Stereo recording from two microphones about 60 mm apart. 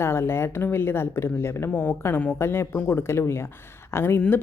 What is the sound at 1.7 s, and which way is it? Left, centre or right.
Speech, left.